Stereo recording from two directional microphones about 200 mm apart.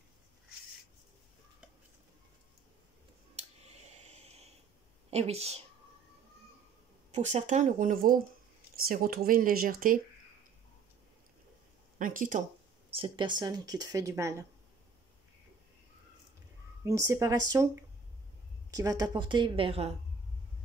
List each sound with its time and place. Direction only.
3.3 s a sound: 35° right (ahead or behind)
5.1 s speech: 30° right (ahead or behind)
7.1 s speech: 35° right (ahead or behind)
12.0 s speech: 40° right (ahead or behind)
12.9 s speech: 25° right (ahead or behind)
16.8 s speech: 15° right (ahead or behind)
18.7 s speech: 15° right (ahead or behind)